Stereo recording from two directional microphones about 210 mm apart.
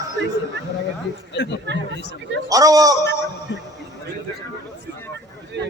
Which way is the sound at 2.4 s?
15° right (ahead or behind).